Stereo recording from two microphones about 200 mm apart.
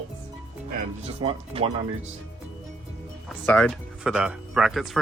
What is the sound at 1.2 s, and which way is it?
Speech, 30° right (ahead or behind).